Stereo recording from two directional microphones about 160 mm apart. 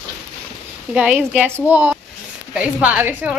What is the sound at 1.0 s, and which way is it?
A woman's voice, 10° right (ahead or behind).